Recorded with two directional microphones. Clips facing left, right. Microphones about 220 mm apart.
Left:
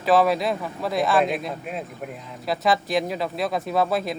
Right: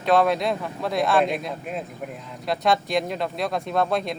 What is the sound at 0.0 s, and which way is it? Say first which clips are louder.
Speech: left 1 dB; 5° left (ahead or behind).